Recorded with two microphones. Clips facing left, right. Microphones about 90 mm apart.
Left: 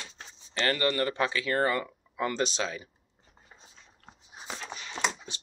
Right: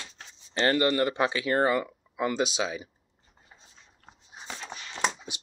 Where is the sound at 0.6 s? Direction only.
25° right (ahead or behind).